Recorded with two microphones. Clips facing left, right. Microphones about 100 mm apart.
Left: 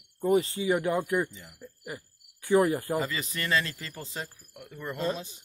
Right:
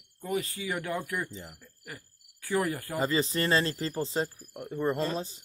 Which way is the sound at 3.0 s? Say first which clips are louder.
Right 4 dB; 30° right (ahead or behind).